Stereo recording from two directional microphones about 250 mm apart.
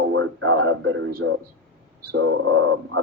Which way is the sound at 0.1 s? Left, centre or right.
Right.